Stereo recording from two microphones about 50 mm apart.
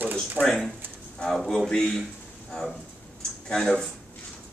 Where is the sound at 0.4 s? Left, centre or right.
Right.